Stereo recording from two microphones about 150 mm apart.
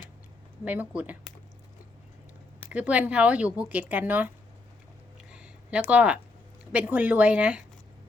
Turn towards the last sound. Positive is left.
turn(degrees=-10)  # may be behind; listen again after turning